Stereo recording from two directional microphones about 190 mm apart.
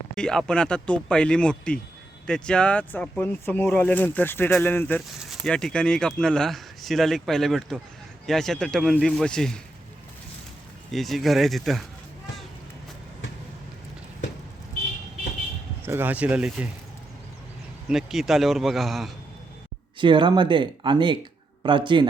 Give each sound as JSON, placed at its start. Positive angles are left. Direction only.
{"t": 0.2, "sound": "speech", "side_deg": 5}
{"t": 10.9, "sound": "speech", "side_deg": 0}
{"t": 15.8, "sound": "speech", "side_deg": -10}
{"t": 17.8, "sound": "speech", "side_deg": 0}
{"t": 20.0, "sound": "speech", "side_deg": -25}